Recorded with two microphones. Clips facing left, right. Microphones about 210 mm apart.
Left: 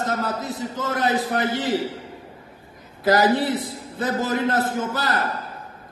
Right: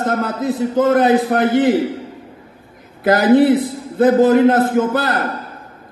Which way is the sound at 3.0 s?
55° right (ahead or behind).